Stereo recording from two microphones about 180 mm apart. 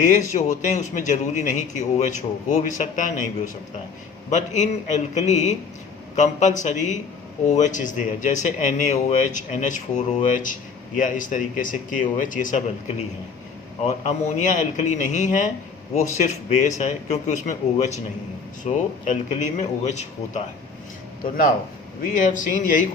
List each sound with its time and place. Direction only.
0.1 s a man's voice: 40° left (ahead or behind)
22.1 s a man's voice: 45° left (ahead or behind)